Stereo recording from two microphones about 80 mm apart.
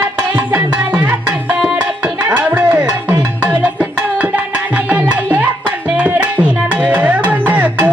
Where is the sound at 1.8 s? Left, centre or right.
Right.